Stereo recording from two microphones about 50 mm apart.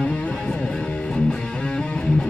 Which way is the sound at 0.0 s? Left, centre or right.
Left.